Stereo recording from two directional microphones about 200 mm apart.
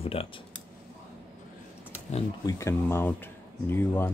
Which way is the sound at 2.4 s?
15° left (ahead or behind).